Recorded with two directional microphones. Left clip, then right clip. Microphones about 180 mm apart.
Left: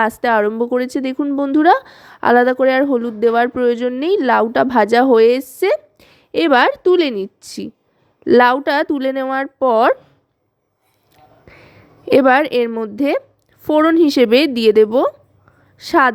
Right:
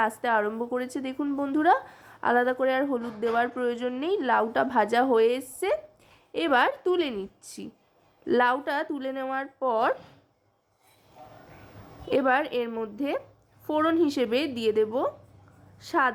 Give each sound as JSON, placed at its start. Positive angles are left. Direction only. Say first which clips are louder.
{"t": 0.0, "sound": "a woman's voice", "louder": "left 10 dB", "side_deg": 45}
{"t": 12.0, "sound": "a woman's voice", "louder": "left 12 dB", "side_deg": 50}